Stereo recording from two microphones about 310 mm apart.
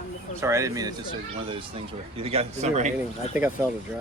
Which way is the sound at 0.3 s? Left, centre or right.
Centre.